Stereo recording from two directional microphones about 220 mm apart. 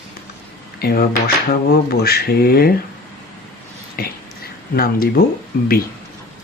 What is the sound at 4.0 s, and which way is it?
Speech, 40° left (ahead or behind).